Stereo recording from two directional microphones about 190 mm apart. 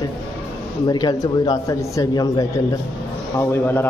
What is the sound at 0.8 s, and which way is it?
A man's voice, 20° left (ahead or behind).